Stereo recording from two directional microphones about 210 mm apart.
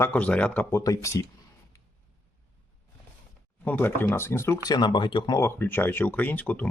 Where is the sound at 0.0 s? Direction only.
5° left (ahead or behind).